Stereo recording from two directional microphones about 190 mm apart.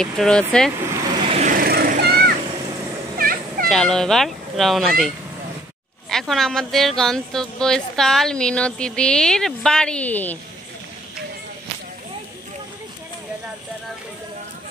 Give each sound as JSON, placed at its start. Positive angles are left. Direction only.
{"t": 0.0, "sound": "speech", "side_deg": 5}
{"t": 1.4, "sound": "vehicle", "side_deg": -50}
{"t": 3.2, "sound": "a sound", "side_deg": -50}
{"t": 3.6, "sound": "speech", "side_deg": 5}